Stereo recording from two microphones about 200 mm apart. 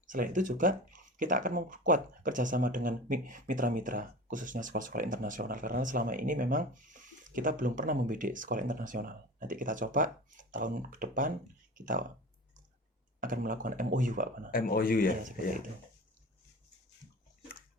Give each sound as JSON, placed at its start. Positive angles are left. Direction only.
{"t": 0.1, "sound": "speech", "side_deg": -40}
{"t": 13.1, "sound": "speech", "side_deg": -45}
{"t": 14.5, "sound": "speech", "side_deg": 45}